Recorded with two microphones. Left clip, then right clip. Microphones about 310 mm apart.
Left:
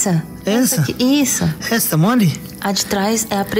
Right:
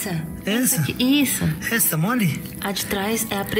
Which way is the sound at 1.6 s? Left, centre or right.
Left.